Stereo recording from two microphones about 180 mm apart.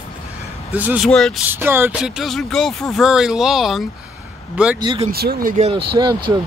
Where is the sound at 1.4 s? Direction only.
10° right (ahead or behind).